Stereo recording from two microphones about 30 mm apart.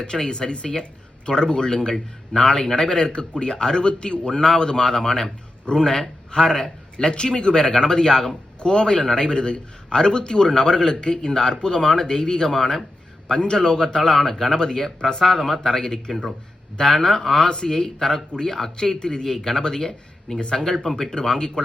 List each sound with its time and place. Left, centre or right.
0.0 s a man's voice: left
4.4 s a man's voice: left
6.9 s a man's voice: left
15.4 s speech: centre
15.7 s a man's voice: centre
17.5 s a man's voice: left
20.8 s a man's voice: centre